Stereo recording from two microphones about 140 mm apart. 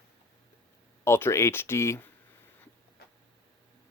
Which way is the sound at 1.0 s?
20° left (ahead or behind).